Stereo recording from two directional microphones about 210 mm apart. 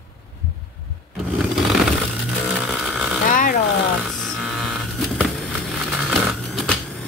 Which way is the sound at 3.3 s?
40° left (ahead or behind).